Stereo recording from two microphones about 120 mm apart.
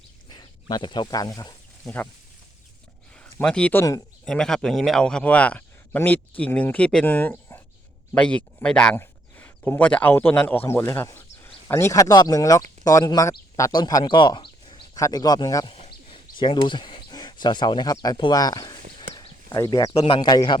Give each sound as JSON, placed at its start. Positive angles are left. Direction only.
{"t": 0.3, "sound": "speech", "side_deg": 40}
{"t": 1.8, "sound": "speech", "side_deg": 15}
{"t": 3.2, "sound": "a man's voice", "side_deg": 10}
{"t": 9.0, "sound": "a sound", "side_deg": 20}
{"t": 9.6, "sound": "speech", "side_deg": 10}